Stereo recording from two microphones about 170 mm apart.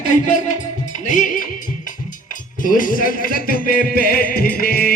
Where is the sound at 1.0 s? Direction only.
50° left (ahead or behind).